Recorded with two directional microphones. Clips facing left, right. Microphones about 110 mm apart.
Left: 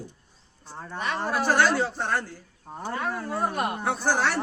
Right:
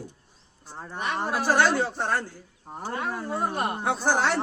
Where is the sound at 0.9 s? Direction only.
15° right (ahead or behind).